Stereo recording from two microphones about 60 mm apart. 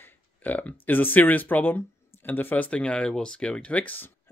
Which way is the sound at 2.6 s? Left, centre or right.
Centre.